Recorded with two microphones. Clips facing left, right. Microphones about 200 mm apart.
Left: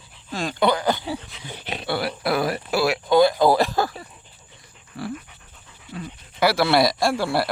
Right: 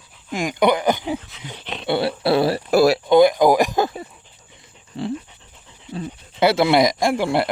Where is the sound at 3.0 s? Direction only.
20° right (ahead or behind).